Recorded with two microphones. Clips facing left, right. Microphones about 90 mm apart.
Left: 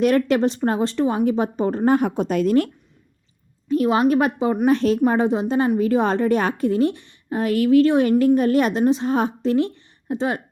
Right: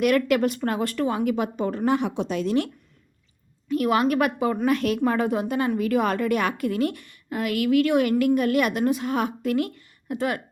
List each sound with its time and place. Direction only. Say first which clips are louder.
0.0 s speech: left 3 dB; 30° left (ahead or behind); by 2.6 s 45° left (ahead or behind)
3.7 s a woman's voice: left 4 dB; 30° left (ahead or behind)